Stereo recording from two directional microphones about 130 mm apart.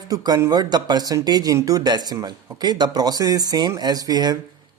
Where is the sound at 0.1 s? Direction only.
30° right (ahead or behind).